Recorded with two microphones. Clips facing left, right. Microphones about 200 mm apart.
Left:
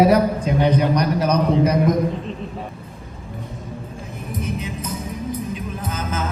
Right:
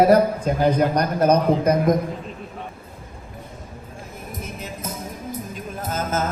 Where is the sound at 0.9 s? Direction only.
50° right (ahead or behind).